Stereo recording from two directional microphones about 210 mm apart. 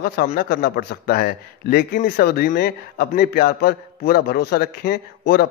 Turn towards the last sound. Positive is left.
turn(degrees=50)  # may be behind; listen again after turning